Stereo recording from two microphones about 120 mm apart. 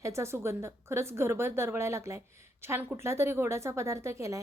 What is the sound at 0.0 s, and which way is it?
A woman's voice, 25° right (ahead or behind).